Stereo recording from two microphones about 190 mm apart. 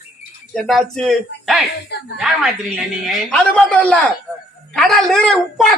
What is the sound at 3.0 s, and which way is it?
Speech, 5° left (ahead or behind).